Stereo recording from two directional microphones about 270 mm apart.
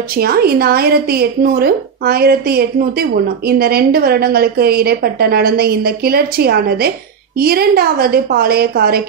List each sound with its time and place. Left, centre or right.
0.1 s a woman's voice: right